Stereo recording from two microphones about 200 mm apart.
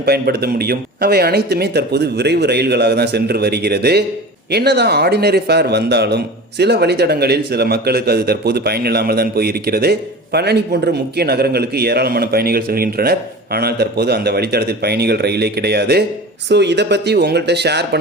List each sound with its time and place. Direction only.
0.0 s a man's voice: 50° right (ahead or behind)